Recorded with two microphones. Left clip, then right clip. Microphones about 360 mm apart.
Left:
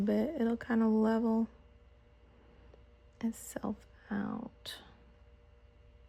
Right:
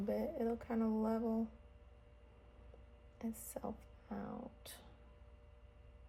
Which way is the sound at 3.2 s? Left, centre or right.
Left.